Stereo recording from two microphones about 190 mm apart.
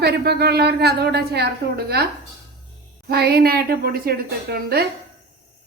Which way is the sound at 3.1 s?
55° right (ahead or behind).